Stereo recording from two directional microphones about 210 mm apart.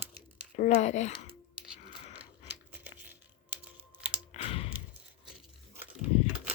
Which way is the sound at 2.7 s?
10° right (ahead or behind).